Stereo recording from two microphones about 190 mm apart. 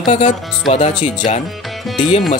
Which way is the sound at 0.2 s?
40° left (ahead or behind).